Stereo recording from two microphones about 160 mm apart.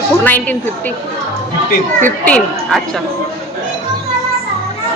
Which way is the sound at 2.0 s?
10° left (ahead or behind).